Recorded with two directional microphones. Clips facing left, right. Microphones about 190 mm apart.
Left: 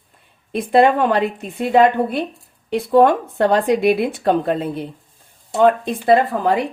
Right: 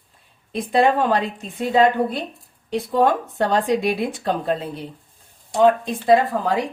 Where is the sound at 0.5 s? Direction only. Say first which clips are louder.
Left 4 dB; 60° left (ahead or behind).